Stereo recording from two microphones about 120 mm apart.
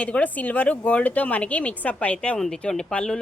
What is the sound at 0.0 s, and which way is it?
A woman's voice, 10° left (ahead or behind).